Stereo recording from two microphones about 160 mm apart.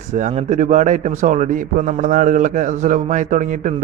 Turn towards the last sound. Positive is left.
turn(degrees=-50)  # may be behind; listen again after turning